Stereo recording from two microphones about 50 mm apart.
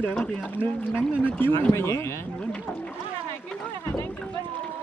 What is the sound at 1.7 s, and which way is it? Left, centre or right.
Speech, left.